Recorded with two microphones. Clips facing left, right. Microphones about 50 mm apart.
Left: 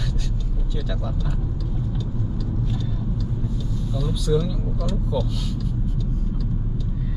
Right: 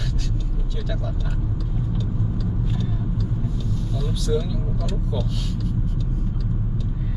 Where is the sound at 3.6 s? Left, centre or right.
Centre.